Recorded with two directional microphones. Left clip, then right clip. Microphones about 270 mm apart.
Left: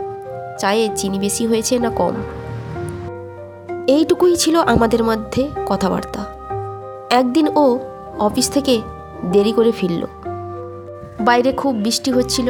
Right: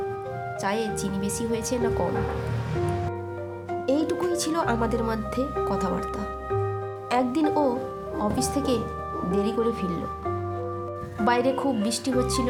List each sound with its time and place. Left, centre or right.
0.6 s speech: left
3.8 s speech: left
11.3 s speech: left